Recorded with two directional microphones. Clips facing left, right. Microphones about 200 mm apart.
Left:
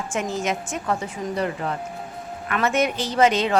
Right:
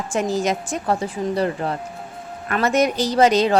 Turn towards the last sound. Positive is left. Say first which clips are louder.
# right 3 dB
turn(degrees=-40)  # may be behind; listen again after turning